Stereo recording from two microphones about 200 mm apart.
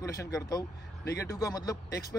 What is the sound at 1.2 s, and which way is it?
Speech, 15° left (ahead or behind).